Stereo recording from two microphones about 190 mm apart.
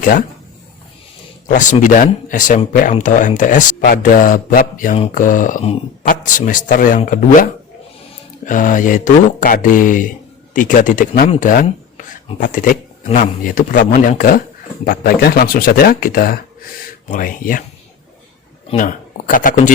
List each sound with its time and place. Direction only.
0.0 s speech: 45° left (ahead or behind)
1.5 s speech: 45° left (ahead or behind)
13.1 s speech: 35° left (ahead or behind)
13.4 s speech: 45° left (ahead or behind)
18.8 s speech: 45° left (ahead or behind)